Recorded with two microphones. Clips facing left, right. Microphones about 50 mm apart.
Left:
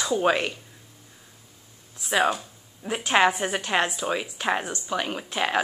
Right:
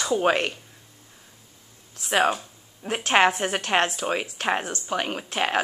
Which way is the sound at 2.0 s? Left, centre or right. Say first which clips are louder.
Right 1 dB; right.